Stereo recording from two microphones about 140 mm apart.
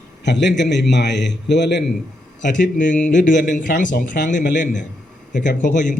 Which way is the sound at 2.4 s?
65° left (ahead or behind).